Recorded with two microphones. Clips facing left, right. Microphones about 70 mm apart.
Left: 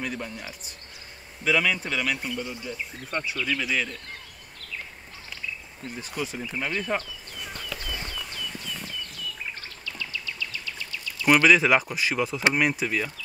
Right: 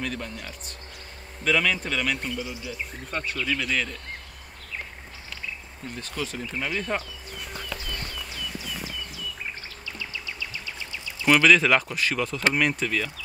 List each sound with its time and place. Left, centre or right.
0.0 s speech: centre
5.9 s speech: centre
7.0 s a sound: centre
8.1 s horse: centre
9.8 s insect: centre
11.2 s speech: centre